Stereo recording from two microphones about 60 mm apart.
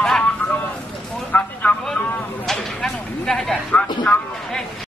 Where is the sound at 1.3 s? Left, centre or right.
Left.